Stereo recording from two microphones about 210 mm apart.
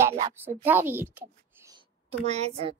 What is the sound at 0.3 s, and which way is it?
A child's voice, 10° right (ahead or behind).